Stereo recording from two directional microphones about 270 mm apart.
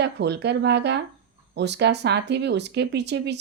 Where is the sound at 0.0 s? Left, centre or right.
Right.